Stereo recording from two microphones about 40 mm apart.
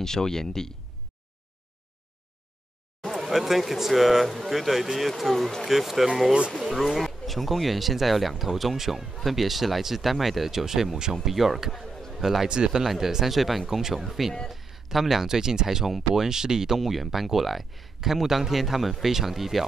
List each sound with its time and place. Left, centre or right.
0.0 s speech: centre
3.1 s speech: centre
12.1 s a sound: centre
12.4 s speech: right
12.8 s speech: centre
14.5 s a sound: centre
15.2 s speech: centre